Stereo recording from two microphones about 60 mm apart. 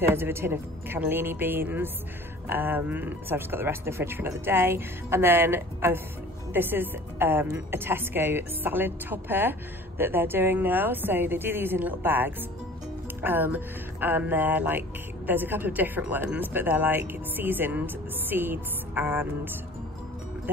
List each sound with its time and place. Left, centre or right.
0.0 s a woman's voice: right